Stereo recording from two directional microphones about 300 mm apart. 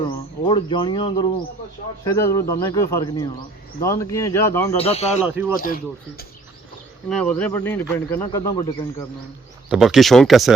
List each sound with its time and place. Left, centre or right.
0.0 s speech: centre
4.8 s speech: centre
5.2 s speech: centre
5.5 s speech: left
7.1 s speech: centre
9.6 s speech: centre